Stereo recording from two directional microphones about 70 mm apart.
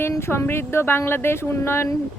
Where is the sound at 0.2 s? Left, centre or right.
Left.